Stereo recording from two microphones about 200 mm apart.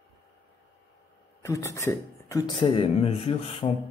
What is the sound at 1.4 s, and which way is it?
Speech, 15° left (ahead or behind).